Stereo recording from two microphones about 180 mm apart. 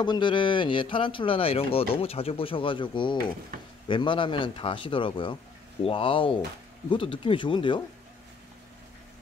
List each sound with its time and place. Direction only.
0.0 s speech: 25° left (ahead or behind)